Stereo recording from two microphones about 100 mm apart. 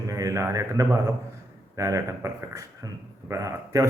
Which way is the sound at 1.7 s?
30° right (ahead or behind).